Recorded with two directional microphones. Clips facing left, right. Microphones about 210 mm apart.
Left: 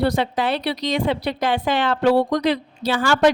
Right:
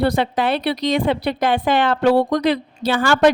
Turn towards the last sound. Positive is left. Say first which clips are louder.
# right 2 dB
turn(degrees=-55)  # may be behind; listen again after turning